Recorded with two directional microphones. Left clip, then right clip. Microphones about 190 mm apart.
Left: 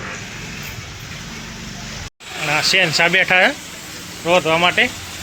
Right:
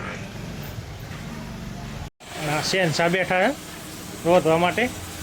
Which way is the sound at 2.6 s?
20° right (ahead or behind).